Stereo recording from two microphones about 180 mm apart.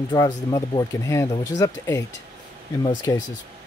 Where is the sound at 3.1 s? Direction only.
15° left (ahead or behind).